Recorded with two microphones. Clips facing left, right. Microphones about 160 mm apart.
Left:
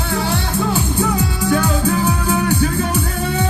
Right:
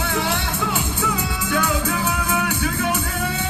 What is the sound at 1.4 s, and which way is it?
Music, 35° left (ahead or behind).